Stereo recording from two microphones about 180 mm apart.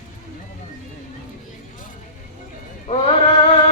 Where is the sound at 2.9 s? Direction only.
35° left (ahead or behind).